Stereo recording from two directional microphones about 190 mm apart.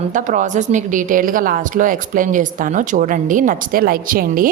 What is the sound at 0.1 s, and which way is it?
A woman's voice, 40° right (ahead or behind).